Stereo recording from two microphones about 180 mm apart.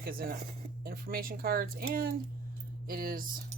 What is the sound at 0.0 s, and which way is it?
Speech, 55° right (ahead or behind).